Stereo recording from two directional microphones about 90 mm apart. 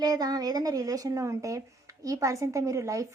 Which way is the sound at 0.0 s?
45° right (ahead or behind).